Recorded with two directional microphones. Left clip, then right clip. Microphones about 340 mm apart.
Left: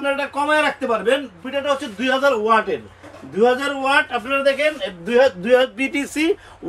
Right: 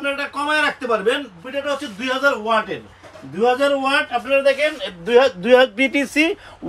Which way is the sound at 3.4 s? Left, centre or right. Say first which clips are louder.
Right 1 dB; centre.